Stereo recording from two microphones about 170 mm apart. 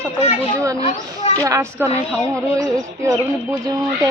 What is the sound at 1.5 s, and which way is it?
Speech, 20° right (ahead or behind).